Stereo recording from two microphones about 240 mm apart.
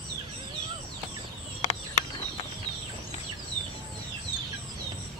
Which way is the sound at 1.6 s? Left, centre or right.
Left.